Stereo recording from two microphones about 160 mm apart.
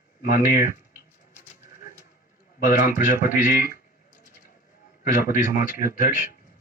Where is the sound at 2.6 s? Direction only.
60° left (ahead or behind).